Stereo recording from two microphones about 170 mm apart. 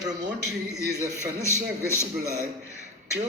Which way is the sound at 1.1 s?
15° left (ahead or behind).